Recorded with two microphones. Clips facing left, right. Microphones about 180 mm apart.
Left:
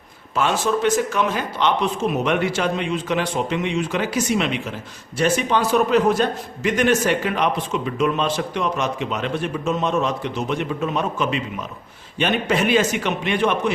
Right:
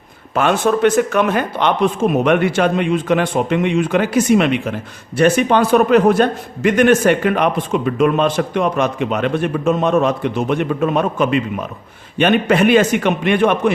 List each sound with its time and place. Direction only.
0.3 s speech: 60° right (ahead or behind)